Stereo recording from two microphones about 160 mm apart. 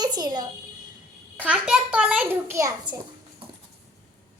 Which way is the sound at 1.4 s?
5° right (ahead or behind).